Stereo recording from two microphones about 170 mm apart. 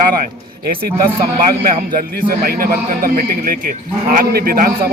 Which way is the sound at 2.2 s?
60° right (ahead or behind).